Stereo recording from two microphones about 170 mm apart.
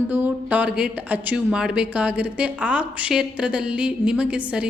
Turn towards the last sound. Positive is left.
turn(degrees=-5)  # may be behind; listen again after turning